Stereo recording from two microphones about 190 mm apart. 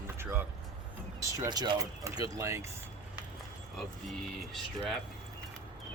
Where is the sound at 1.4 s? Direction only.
20° right (ahead or behind).